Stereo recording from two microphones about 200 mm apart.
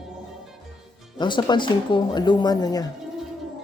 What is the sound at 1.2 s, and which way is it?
Speech, 20° left (ahead or behind).